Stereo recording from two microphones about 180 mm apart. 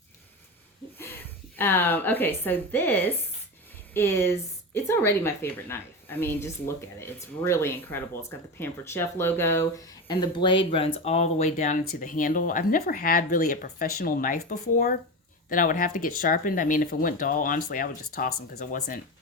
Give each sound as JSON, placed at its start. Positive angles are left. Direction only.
{"t": 1.5, "sound": "a woman's voice", "side_deg": 10}
{"t": 15.4, "sound": "speech", "side_deg": 50}